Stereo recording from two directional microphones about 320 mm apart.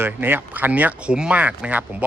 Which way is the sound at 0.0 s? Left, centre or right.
Centre.